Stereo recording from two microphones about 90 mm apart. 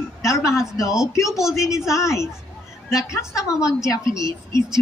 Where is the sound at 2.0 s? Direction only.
35° left (ahead or behind).